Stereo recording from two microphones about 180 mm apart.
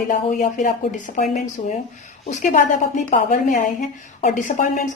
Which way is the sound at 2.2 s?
45° left (ahead or behind).